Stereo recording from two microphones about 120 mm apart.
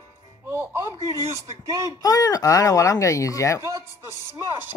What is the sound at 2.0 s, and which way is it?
Speech, 30° left (ahead or behind).